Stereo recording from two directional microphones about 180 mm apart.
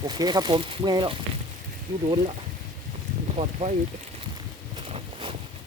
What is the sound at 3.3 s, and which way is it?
Speech, 35° right (ahead or behind).